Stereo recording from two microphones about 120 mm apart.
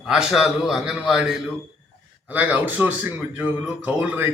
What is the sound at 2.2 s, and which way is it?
A man's voice, 15° right (ahead or behind).